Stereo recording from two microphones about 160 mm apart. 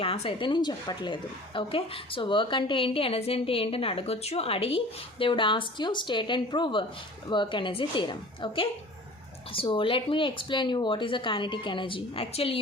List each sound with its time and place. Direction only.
0.0 s a woman's voice: 35° left (ahead or behind)